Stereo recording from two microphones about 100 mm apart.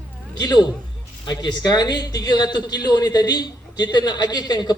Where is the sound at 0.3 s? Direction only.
40° left (ahead or behind).